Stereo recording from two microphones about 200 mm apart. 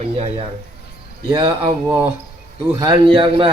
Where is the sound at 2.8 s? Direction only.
25° right (ahead or behind).